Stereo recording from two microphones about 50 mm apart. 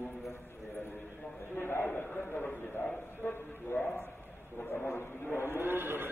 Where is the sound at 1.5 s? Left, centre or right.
Left.